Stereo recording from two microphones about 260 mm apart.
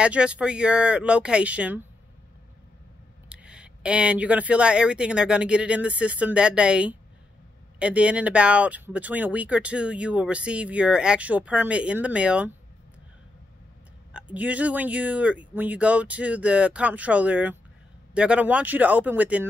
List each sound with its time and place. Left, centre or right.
0.0 s speech: centre
3.3 s speech: centre
14.1 s speech: centre